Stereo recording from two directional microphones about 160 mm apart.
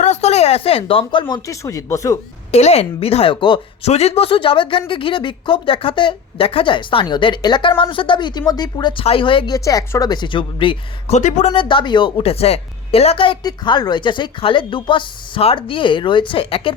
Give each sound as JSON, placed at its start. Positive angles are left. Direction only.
{"t": 0.0, "sound": "speech", "side_deg": 45}
{"t": 2.5, "sound": "a woman's voice", "side_deg": 40}
{"t": 9.6, "sound": "a woman's voice", "side_deg": 20}
{"t": 11.2, "sound": "speech", "side_deg": 50}
{"t": 11.5, "sound": "a woman's voice", "side_deg": 30}